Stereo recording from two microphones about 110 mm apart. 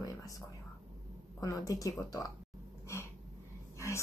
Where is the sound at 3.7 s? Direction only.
25° left (ahead or behind).